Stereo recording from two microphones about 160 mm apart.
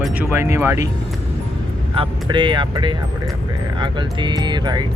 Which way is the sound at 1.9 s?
30° right (ahead or behind).